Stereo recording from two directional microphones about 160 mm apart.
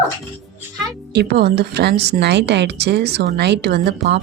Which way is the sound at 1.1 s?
85° right.